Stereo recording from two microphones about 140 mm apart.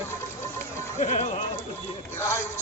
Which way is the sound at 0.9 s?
60° left (ahead or behind).